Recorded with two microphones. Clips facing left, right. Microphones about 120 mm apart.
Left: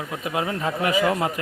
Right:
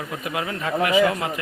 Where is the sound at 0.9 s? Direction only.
40° left (ahead or behind).